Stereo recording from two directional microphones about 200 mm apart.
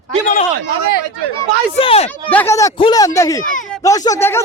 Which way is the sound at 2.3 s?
10° left (ahead or behind).